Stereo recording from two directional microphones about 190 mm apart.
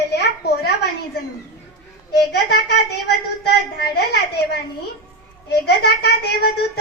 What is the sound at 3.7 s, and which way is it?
A woman's voice, 60° left (ahead or behind).